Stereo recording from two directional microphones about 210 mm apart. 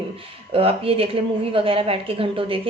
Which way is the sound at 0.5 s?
25° right (ahead or behind).